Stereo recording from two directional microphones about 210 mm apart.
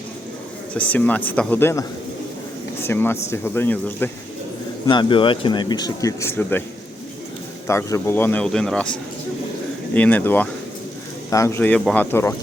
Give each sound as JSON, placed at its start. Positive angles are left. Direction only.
{"t": 0.7, "sound": "speech", "side_deg": 5}
{"t": 2.8, "sound": "speech", "side_deg": 10}
{"t": 4.9, "sound": "speech", "side_deg": 20}
{"t": 7.7, "sound": "speech", "side_deg": 15}